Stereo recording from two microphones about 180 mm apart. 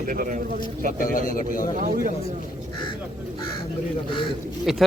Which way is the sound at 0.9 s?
50° left (ahead or behind).